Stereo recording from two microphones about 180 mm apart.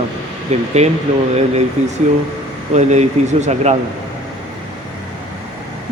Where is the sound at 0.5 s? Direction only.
35° right (ahead or behind).